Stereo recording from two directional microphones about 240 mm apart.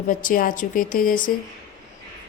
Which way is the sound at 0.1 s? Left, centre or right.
Left.